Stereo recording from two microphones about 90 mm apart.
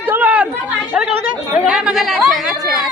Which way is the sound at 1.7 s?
5° right (ahead or behind).